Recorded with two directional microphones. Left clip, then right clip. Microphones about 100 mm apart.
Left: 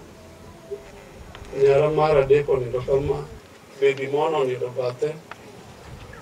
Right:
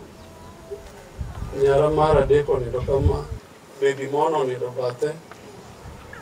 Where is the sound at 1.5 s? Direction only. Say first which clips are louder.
Even; 15° right (ahead or behind).